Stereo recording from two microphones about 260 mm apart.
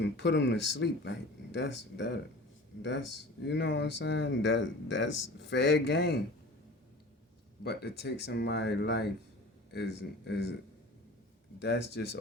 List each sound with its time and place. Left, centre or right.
0.0 s speech: left
3.4 s speech: left
5.0 s speech: left
5.4 s speech: left
7.6 s speech: left
11.6 s speech: left